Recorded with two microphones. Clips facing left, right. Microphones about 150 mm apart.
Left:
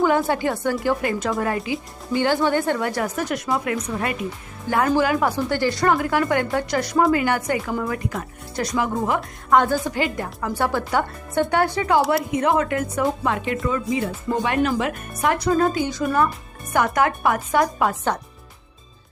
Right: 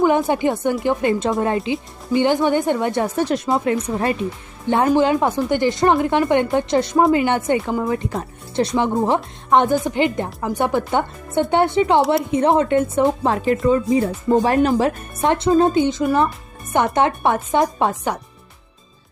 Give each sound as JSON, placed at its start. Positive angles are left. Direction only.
{"t": 0.3, "sound": "speech", "side_deg": -20}